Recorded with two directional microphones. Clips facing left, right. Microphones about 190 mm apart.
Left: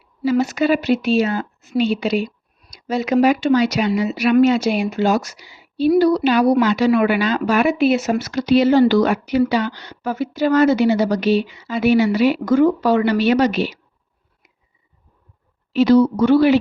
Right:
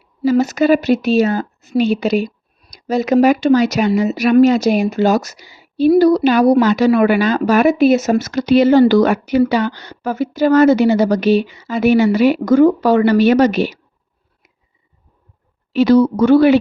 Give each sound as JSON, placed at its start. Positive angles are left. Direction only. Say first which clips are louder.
{"t": 0.3, "sound": "speech", "louder": "right 4 dB", "side_deg": -40}
{"t": 15.9, "sound": "speech", "louder": "right 3 dB", "side_deg": -45}